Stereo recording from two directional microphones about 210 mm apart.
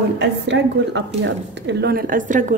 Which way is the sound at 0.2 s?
55° right (ahead or behind).